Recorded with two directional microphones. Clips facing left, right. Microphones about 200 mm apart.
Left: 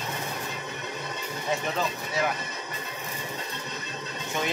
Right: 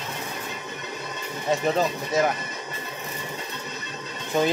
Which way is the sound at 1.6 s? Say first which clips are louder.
Right 6 dB; 40° right (ahead or behind).